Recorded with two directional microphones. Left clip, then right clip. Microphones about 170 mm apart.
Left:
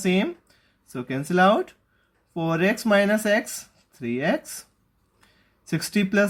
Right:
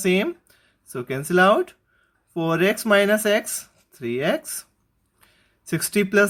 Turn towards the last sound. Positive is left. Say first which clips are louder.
# right 4 dB
turn(degrees=-45)  # may be behind; listen again after turning